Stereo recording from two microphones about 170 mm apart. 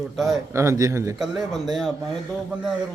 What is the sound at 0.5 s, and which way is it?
Speech, 20° right (ahead or behind).